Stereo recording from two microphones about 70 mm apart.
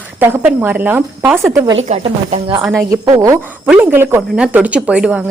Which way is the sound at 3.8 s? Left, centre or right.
Right.